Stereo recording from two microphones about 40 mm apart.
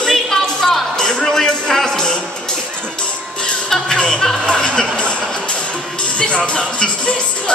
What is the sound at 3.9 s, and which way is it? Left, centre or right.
Music, left.